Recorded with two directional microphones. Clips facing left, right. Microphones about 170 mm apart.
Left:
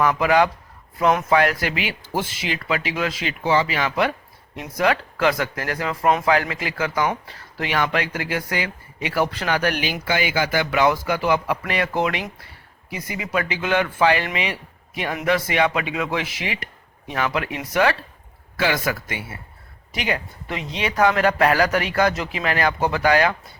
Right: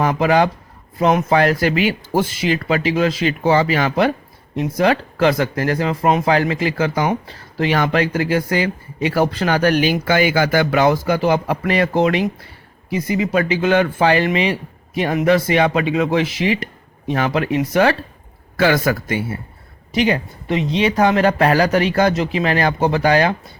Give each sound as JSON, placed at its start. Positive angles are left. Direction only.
{"t": 0.0, "sound": "speech", "side_deg": -30}
{"t": 13.3, "sound": "speech", "side_deg": -35}
{"t": 18.5, "sound": "speech", "side_deg": -45}